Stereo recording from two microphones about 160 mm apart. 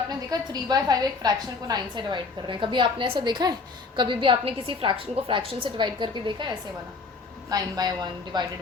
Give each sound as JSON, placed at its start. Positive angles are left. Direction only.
{"t": 0.1, "sound": "a woman's voice", "side_deg": -25}